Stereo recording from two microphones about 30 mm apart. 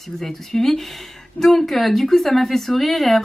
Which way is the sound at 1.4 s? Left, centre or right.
Centre.